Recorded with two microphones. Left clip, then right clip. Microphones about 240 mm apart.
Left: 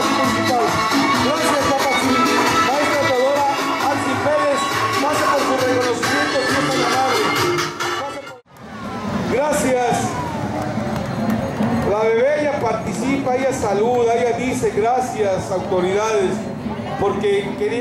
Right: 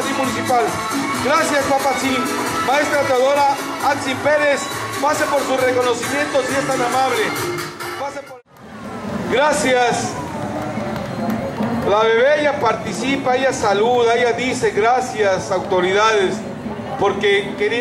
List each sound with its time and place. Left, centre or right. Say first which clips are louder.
1.2 s music: right 1 dB; right
3.8 s speech: right 5 dB; centre
9.3 s speech: right 3 dB; centre
11.9 s speech: right 3 dB; right